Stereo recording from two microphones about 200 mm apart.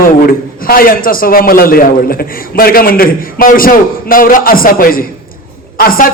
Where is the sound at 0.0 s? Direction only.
45° left (ahead or behind).